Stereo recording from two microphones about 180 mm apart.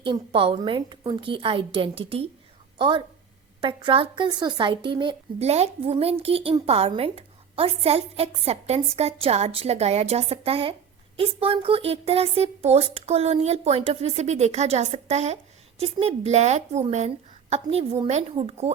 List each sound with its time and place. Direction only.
0.0 s a woman's voice: 30° right (ahead or behind)